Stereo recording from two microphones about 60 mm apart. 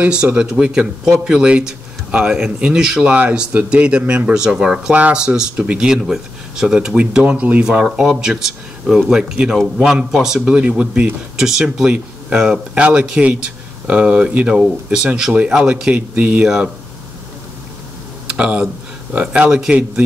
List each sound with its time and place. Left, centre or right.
0.0 s speech: centre
7.0 s speech: right
18.2 s a sound: centre
19.1 s speech: right